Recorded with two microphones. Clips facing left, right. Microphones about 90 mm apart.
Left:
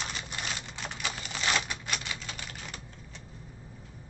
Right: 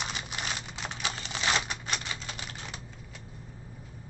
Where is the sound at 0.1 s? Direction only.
10° right (ahead or behind).